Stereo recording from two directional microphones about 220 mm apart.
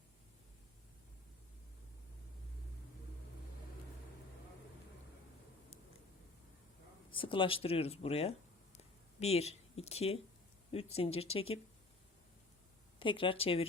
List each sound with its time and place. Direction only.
7.1 s speech: 25° left (ahead or behind)
8.8 s a sound: 30° left (ahead or behind)
10.7 s speech: 25° left (ahead or behind)
13.0 s speech: 20° left (ahead or behind)